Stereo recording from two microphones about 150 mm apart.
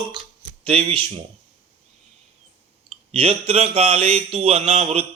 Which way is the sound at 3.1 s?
40° right (ahead or behind).